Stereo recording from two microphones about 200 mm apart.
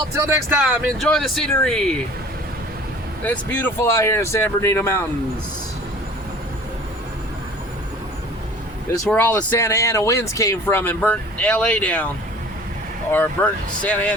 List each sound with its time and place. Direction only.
0.2 s speech: 10° right (ahead or behind)
0.9 s speech: centre (ahead or behind)
3.2 s speech: 10° left (ahead or behind)
9.0 s speech: 10° left (ahead or behind)
13.1 s speech: 10° left (ahead or behind)